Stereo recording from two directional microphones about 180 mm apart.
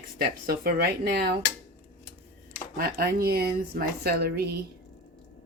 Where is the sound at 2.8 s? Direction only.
60° right (ahead or behind).